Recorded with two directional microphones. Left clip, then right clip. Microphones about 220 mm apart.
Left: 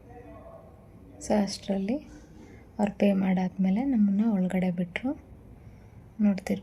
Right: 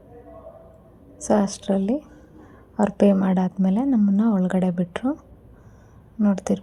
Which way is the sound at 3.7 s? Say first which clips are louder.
Right 5 dB; 10° right (ahead or behind).